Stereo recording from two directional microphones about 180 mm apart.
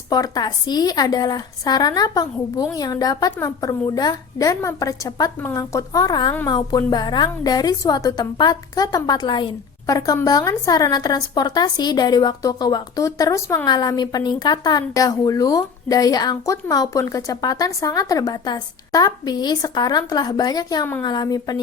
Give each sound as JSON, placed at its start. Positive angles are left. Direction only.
{"t": 0.1, "sound": "a woman's voice", "side_deg": 20}